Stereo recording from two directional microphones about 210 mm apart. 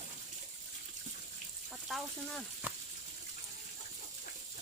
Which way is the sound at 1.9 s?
Centre (ahead or behind).